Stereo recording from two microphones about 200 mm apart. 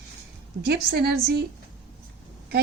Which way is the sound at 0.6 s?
55° right (ahead or behind).